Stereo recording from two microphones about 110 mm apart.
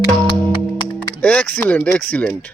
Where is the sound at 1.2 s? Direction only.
10° left (ahead or behind).